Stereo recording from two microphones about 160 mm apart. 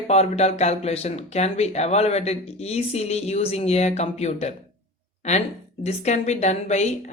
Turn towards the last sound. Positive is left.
turn(degrees=45)  # may be behind; listen again after turning